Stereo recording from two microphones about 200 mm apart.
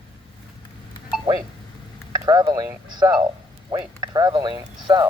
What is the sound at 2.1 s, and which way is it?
Speech, 20° right (ahead or behind).